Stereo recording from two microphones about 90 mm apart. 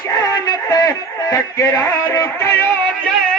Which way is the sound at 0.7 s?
40° left (ahead or behind).